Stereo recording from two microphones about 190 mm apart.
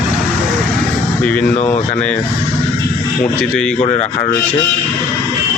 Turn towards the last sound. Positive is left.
turn(degrees=35)  # may be behind; listen again after turning